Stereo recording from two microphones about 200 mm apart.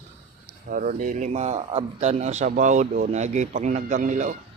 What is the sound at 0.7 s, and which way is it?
A man's voice, 40° right (ahead or behind).